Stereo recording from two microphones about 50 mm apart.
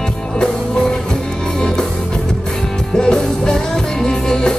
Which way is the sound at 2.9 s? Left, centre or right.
Centre.